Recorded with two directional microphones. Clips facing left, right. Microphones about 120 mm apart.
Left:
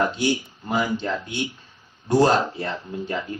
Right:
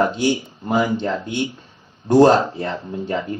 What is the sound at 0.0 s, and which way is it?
Speech, 25° right (ahead or behind).